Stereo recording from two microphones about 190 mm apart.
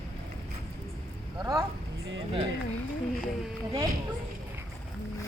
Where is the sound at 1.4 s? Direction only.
20° right (ahead or behind).